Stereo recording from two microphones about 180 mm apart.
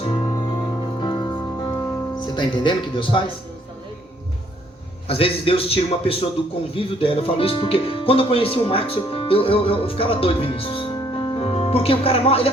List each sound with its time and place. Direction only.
0.0 s music: 30° left (ahead or behind)
2.1 s speech: 25° left (ahead or behind)
5.0 s a man's voice: 30° left (ahead or behind)